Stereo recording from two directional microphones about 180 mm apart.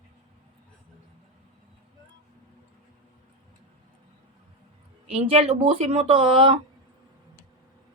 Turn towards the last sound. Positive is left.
turn(degrees=-30)  # may be behind; listen again after turning